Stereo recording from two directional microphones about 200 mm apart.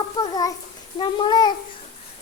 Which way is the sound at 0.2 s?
20° left (ahead or behind).